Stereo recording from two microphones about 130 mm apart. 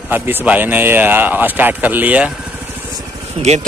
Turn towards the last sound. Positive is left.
turn(degrees=-55)  # may be behind; listen again after turning